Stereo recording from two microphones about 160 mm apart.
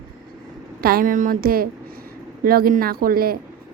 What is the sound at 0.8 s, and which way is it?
A woman's voice, 70° right (ahead or behind).